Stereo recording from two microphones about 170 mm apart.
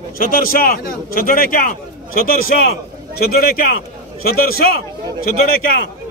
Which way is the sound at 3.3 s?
60° left (ahead or behind).